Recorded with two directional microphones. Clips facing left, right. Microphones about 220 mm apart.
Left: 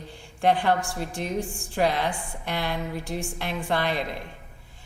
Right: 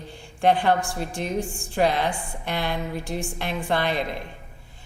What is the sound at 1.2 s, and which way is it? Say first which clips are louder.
Speech: right 2 dB; 20° right (ahead or behind).